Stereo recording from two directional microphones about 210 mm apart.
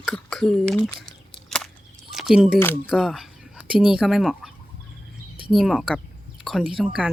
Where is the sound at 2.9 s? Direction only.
Centre (ahead or behind).